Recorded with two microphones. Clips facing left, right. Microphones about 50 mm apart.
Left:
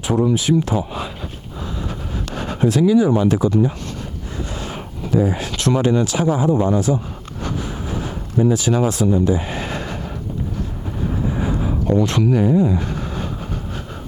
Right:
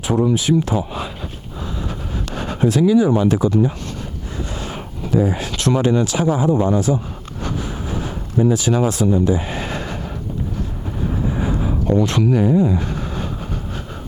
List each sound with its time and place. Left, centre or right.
0.0 s speech: right
1.9 s a sound: right
4.5 s speech: right
7.4 s vehicle: right
8.5 s speech: centre
11.1 s vehicle: right
11.9 s speech: right